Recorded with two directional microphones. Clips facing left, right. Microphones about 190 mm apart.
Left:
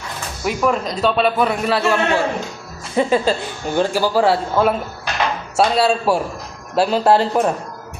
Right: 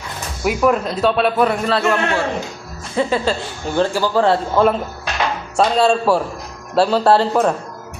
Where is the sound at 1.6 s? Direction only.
10° left (ahead or behind).